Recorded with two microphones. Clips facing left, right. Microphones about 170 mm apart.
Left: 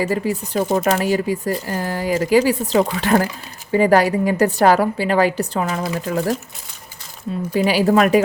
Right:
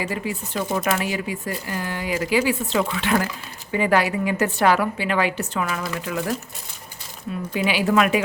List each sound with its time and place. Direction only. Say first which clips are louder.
0.0 s speech: left 7 dB; 40° left (ahead or behind)
7.5 s speech: left 5 dB; 40° left (ahead or behind)